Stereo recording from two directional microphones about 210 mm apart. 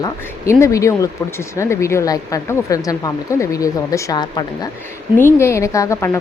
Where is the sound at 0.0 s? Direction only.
15° left (ahead or behind).